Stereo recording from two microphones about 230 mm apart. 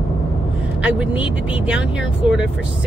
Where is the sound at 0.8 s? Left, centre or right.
Centre.